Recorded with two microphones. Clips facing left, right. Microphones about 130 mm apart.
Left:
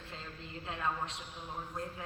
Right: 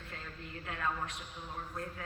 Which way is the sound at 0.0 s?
25° left (ahead or behind).